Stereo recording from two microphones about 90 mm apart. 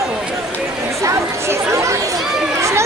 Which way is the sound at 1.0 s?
35° right (ahead or behind).